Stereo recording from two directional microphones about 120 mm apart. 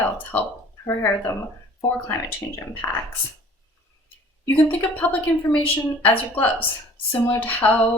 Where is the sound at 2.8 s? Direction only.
20° left (ahead or behind).